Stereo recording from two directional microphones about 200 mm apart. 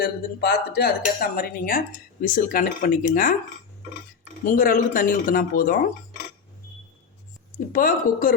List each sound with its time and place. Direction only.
0.0 s speech: 50° left (ahead or behind)
4.4 s speech: 45° left (ahead or behind)
7.7 s speech: 45° left (ahead or behind)